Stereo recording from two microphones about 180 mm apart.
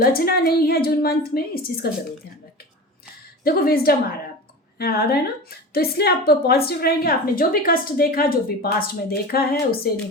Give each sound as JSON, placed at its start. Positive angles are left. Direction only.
{"t": 0.0, "sound": "a woman's voice", "side_deg": 55}
{"t": 3.4, "sound": "a woman's voice", "side_deg": 55}